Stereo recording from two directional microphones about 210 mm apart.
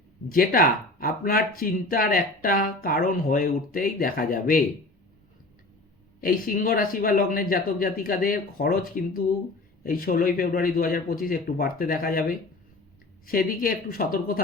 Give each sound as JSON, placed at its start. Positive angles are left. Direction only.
{"t": 0.3, "sound": "speech", "side_deg": 40}
{"t": 6.2, "sound": "speech", "side_deg": 40}